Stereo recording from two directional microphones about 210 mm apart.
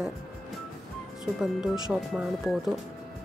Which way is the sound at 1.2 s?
5° right (ahead or behind).